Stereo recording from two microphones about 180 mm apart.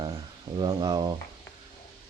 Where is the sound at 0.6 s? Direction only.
25° right (ahead or behind).